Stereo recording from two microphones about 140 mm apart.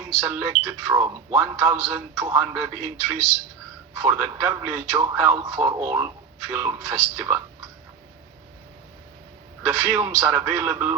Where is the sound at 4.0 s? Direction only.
15° right (ahead or behind).